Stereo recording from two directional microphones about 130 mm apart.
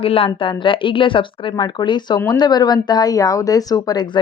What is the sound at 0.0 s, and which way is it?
A woman's voice, 45° left (ahead or behind).